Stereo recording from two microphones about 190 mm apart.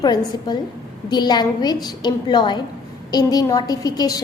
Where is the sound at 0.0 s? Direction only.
20° left (ahead or behind).